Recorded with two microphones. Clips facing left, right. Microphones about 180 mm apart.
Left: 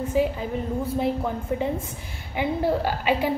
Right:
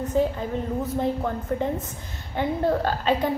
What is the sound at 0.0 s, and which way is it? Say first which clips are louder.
A woman's voice: even; 10° left (ahead or behind).